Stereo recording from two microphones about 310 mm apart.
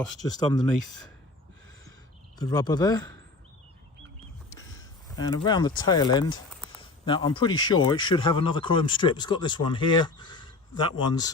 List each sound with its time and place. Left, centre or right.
0.3 s speech: centre
2.4 s speech: centre
5.1 s speech: centre